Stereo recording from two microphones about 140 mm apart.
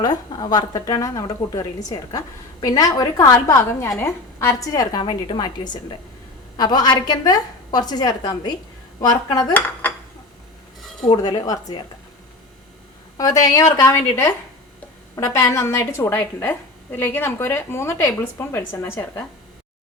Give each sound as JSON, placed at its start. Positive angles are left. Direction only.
{"t": 0.0, "sound": "a woman's voice", "side_deg": 30}
{"t": 9.5, "sound": "dishes", "side_deg": 10}
{"t": 11.2, "sound": "a woman's voice", "side_deg": 30}
{"t": 13.1, "sound": "a woman's voice", "side_deg": 25}